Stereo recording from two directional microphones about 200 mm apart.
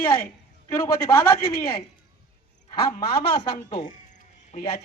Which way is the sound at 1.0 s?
15° left (ahead or behind).